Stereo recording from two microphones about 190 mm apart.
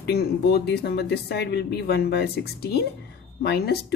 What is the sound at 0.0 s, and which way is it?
Speech, 60° left (ahead or behind).